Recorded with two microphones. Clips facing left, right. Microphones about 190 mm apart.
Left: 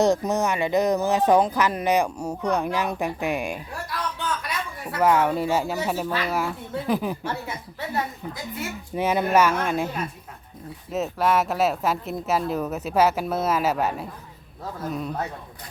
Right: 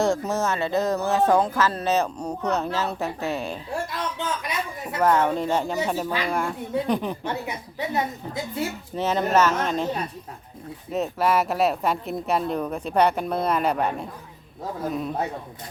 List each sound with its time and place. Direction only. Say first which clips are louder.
0.0 s speech: left 2 dB; 20° left (ahead or behind)
3.7 s speech: right 3 dB; 25° right (ahead or behind)
4.9 s speech: even; 10° left (ahead or behind)
7.3 s a woman's voice: right 1 dB; 20° right (ahead or behind)
9.0 s speech: left 1 dB; 10° left (ahead or behind)
10.9 s speech: even; centre (ahead or behind)